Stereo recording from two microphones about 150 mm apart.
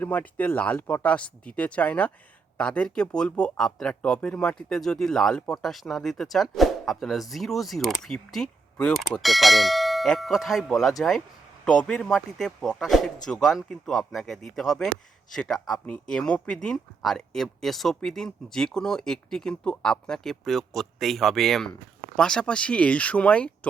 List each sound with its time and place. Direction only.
0.0 s speech: 10° left (ahead or behind)